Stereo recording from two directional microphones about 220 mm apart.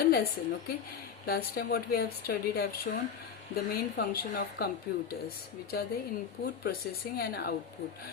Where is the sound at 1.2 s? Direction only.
45° left (ahead or behind).